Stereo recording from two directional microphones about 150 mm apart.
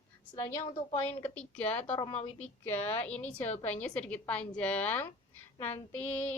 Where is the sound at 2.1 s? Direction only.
40° left (ahead or behind).